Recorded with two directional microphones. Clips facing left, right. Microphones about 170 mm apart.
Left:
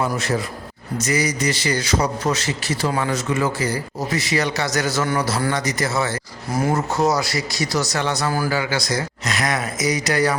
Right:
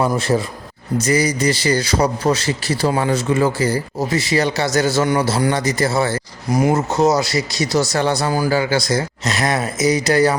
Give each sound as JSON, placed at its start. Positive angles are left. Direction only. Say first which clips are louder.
{"t": 0.0, "sound": "a man's voice", "louder": "right 5 dB", "side_deg": -30}
{"t": 6.5, "sound": "speech", "louder": "right 4 dB", "side_deg": -15}